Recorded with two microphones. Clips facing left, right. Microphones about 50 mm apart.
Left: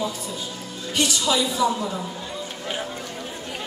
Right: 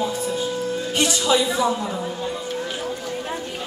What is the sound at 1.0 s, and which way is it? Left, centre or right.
Speech, right.